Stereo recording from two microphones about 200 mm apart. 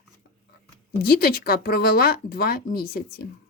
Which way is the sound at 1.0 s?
50° left (ahead or behind).